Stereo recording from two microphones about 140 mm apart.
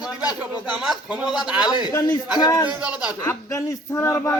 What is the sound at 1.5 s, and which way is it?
A man's voice, 30° left (ahead or behind).